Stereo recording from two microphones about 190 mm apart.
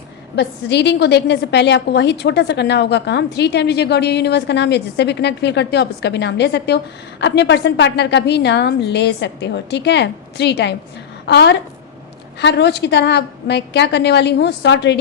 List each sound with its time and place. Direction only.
0.3 s a woman's voice: 65° left (ahead or behind)